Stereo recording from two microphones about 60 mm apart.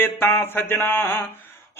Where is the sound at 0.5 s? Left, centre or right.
Left.